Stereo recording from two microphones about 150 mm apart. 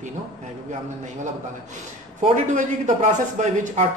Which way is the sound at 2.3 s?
55° right (ahead or behind).